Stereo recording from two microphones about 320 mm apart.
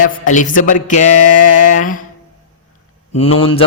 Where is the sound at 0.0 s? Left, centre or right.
Left.